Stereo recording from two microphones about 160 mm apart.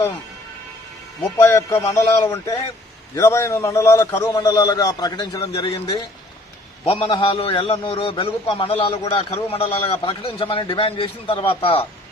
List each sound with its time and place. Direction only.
1.4 s a man's voice: 15° left (ahead or behind); by 11.9 s 35° left (ahead or behind)